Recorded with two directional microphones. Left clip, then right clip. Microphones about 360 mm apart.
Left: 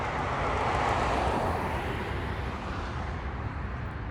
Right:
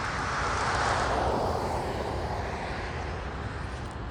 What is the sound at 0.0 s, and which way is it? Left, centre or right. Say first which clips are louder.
Vehicle: even; centre.